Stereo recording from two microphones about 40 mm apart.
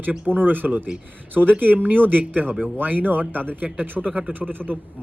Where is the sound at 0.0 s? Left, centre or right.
Right.